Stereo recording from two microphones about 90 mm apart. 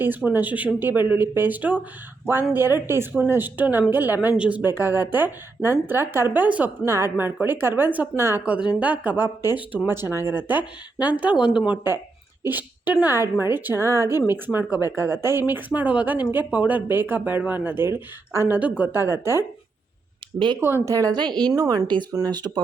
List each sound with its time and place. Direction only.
0.3 s a woman's voice: 20° right (ahead or behind)
8.4 s a woman's voice: 15° right (ahead or behind)
20.6 s a woman's voice: 25° right (ahead or behind)
20.8 s a woman's voice: 40° right (ahead or behind)
21.1 s a woman's voice: 55° right (ahead or behind)